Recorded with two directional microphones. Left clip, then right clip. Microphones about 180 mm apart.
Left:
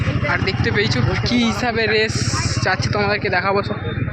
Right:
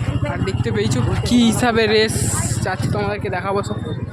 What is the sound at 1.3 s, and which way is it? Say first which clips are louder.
Speech: right 5 dB; 45° right (ahead or behind).